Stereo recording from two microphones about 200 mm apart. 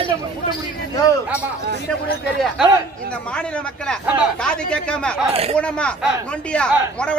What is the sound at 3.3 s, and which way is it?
Speech, 5° left (ahead or behind).